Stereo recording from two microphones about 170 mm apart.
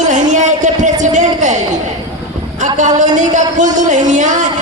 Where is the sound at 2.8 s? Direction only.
45° right (ahead or behind).